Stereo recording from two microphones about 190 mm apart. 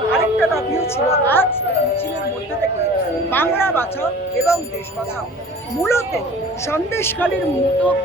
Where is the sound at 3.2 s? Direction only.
10° left (ahead or behind).